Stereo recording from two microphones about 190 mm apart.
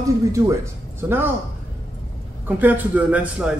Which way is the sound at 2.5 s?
10° right (ahead or behind).